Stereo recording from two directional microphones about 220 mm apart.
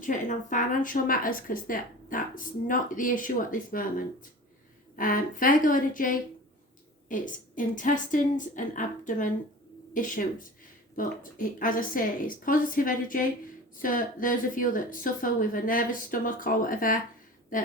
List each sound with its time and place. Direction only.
0.0 s a woman's voice: 35° left (ahead or behind)